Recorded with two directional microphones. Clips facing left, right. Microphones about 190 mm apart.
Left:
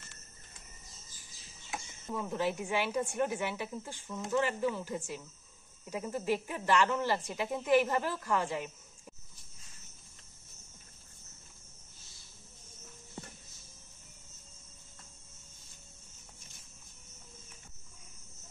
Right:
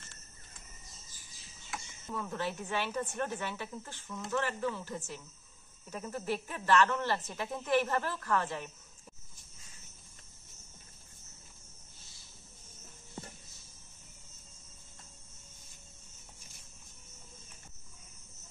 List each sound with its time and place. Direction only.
1.7 s a woman's voice: 15° left (ahead or behind)